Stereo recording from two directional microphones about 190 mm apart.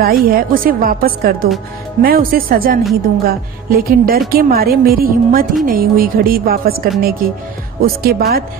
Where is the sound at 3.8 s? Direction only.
50° right (ahead or behind).